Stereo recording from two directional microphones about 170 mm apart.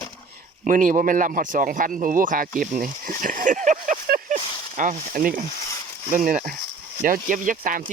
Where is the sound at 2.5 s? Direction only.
50° right (ahead or behind).